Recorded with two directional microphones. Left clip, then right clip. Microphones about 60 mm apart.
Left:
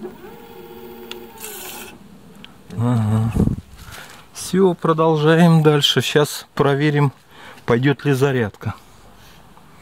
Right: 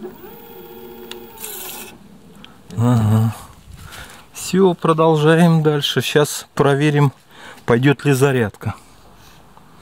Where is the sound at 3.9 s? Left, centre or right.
Centre.